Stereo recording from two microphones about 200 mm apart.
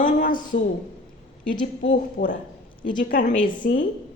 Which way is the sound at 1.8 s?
45° left (ahead or behind).